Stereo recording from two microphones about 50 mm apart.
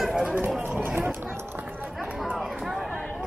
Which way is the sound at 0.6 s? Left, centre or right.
Right.